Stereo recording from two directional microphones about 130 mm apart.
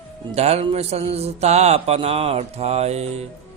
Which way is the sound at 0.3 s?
55° right (ahead or behind).